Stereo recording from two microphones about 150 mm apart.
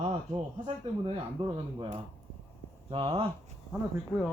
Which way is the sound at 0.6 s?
35° right (ahead or behind).